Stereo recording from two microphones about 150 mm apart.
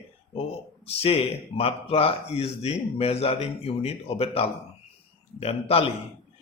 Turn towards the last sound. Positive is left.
turn(degrees=40)  # may be behind; listen again after turning